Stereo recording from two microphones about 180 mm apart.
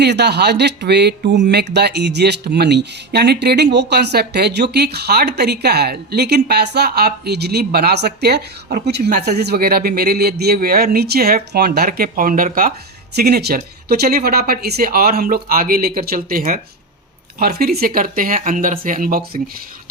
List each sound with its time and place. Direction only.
0.0 s speech: 70° right (ahead or behind); by 12.5 s 50° right (ahead or behind)
13.1 s speech: 60° right (ahead or behind)